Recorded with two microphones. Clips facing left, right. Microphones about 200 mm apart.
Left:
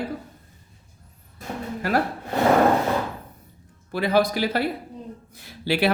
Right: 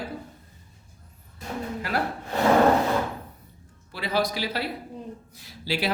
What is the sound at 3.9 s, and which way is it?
Speech, 55° left (ahead or behind).